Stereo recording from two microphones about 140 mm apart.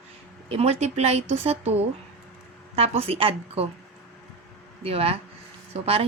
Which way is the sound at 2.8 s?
45° right (ahead or behind).